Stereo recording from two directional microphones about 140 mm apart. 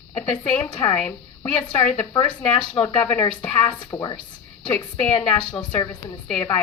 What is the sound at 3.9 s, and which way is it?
Speech, 30° left (ahead or behind).